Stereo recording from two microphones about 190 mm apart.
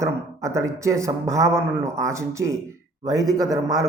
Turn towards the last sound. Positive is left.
turn(degrees=-20)  # may be behind; listen again after turning